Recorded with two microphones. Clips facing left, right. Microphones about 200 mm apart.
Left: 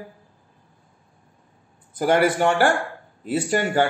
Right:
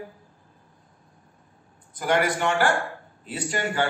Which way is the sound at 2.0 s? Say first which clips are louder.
Left 5 dB; 45° left (ahead or behind).